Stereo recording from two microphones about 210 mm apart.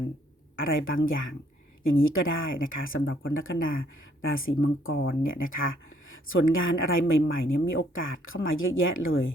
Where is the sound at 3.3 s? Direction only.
70° left (ahead or behind).